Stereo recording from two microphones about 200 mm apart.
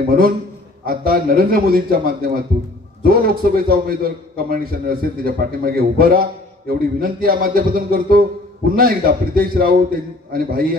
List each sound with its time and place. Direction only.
0.8 s a man's voice: 50° right (ahead or behind)